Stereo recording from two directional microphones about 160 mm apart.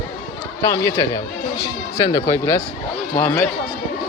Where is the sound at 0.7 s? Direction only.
20° left (ahead or behind).